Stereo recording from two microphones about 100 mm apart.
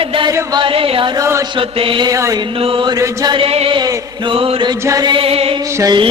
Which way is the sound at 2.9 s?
40° right (ahead or behind).